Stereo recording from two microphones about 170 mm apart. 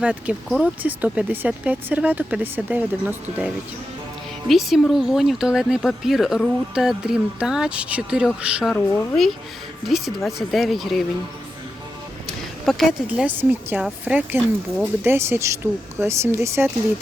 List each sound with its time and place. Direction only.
0.0 s speech: 5° right (ahead or behind)
12.6 s speech: centre (ahead or behind)